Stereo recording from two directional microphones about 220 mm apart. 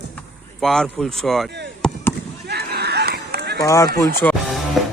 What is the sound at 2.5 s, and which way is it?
Run, 45° right (ahead or behind).